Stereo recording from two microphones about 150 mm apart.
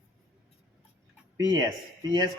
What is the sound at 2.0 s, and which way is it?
Speech, 25° right (ahead or behind).